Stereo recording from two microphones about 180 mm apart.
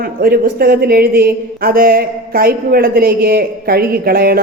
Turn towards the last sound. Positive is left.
turn(degrees=-55)  # may be behind; listen again after turning